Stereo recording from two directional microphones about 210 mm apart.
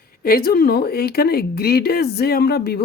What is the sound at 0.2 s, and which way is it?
Speech, 45° left (ahead or behind).